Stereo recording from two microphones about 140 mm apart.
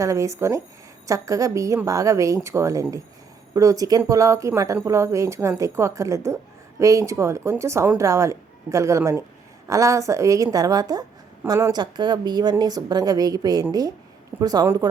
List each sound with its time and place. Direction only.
0.0 s a woman's voice: 20° right (ahead or behind)